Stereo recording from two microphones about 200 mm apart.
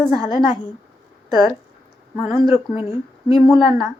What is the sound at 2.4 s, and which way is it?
Speech, 30° left (ahead or behind).